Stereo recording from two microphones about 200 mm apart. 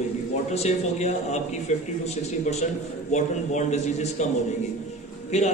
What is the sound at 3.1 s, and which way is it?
A man's voice, 35° left (ahead or behind).